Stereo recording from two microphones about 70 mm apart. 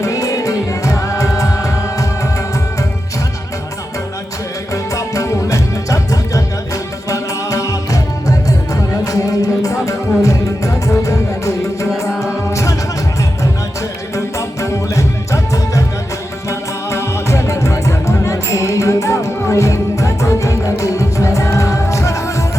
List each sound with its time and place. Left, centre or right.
0.0 s music: left
4.7 s music: left
14.3 s music: left